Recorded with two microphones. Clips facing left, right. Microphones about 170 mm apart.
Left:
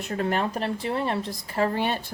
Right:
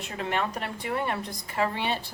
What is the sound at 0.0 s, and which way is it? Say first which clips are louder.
A woman's voice: left 4 dB; 40° left (ahead or behind).